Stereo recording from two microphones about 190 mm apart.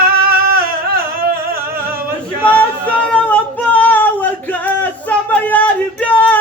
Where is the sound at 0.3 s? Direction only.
50° right (ahead or behind).